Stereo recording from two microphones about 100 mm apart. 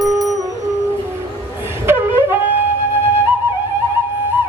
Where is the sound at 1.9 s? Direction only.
20° right (ahead or behind).